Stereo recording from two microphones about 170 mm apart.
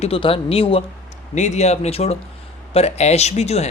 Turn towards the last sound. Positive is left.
turn(degrees=40)  # may be behind; listen again after turning